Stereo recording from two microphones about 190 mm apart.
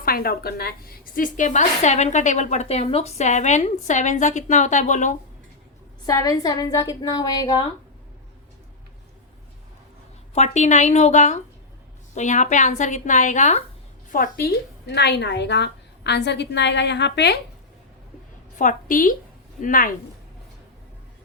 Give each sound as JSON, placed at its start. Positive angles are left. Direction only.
{"t": 0.0, "sound": "a woman's voice", "side_deg": 50}
{"t": 6.1, "sound": "a woman's voice", "side_deg": 15}
{"t": 10.3, "sound": "a woman's voice", "side_deg": 35}
{"t": 14.1, "sound": "a woman's voice", "side_deg": 50}
{"t": 18.5, "sound": "a woman's voice", "side_deg": 40}